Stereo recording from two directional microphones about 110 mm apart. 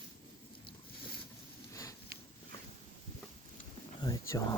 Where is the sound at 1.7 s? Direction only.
30° left (ahead or behind).